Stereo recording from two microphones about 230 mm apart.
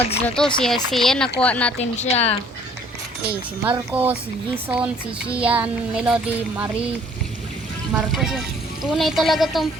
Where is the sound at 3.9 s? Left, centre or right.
Centre.